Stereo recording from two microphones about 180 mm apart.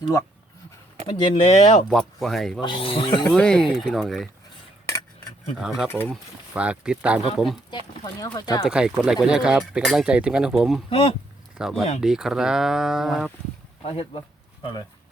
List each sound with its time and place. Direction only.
1.2 s speech: 30° left (ahead or behind)
1.9 s speech: centre (ahead or behind)
2.6 s speech: 30° left (ahead or behind)
3.2 s speech: 5° left (ahead or behind)
5.5 s speech: centre (ahead or behind)
8.0 s speech: 20° left (ahead or behind)
8.6 s speech: 5° right (ahead or behind)
10.8 s speech: 30° left (ahead or behind)
11.5 s speech: centre (ahead or behind)
13.8 s speech: 35° left (ahead or behind)